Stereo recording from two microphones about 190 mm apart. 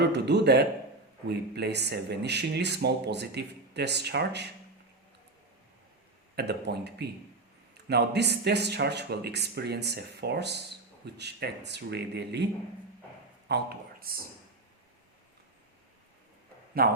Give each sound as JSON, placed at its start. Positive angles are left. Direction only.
{"t": 0.0, "sound": "speech", "side_deg": -65}
{"t": 6.3, "sound": "speech", "side_deg": -60}
{"t": 13.5, "sound": "speech", "side_deg": -55}
{"t": 16.8, "sound": "speech", "side_deg": -50}